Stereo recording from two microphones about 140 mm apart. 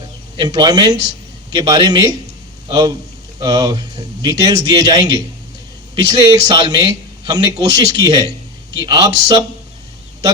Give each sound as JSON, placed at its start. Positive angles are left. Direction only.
{"t": 0.3, "sound": "a man's voice", "side_deg": -30}